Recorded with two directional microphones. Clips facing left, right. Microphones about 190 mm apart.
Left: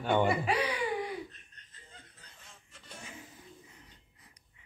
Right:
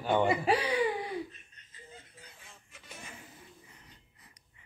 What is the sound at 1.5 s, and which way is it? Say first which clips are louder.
Snicker: right 5 dB; 10° right (ahead or behind).